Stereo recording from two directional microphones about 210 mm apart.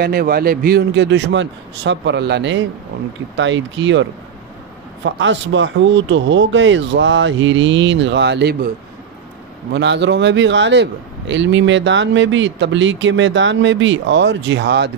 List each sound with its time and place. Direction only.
0.0 s a man's voice: 45° right (ahead or behind)
9.7 s a man's voice: 55° right (ahead or behind)